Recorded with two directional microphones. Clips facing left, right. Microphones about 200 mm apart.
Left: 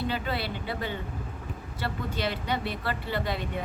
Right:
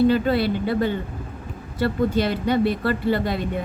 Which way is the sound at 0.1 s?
40° right (ahead or behind).